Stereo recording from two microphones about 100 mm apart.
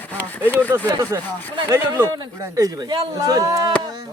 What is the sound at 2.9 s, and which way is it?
Speech, 40° right (ahead or behind).